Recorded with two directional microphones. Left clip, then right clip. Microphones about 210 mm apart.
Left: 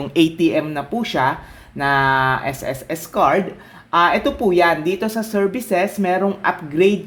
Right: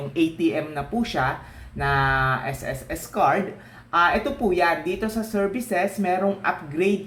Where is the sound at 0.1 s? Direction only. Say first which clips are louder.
Left 7 dB; 50° left (ahead or behind).